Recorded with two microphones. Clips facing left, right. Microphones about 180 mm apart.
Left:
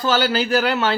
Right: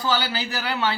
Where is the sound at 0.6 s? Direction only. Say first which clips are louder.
Left 5 dB; 80° left.